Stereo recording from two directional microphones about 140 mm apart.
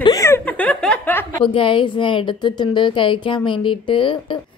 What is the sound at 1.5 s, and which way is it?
A woman's voice, 35° left (ahead or behind).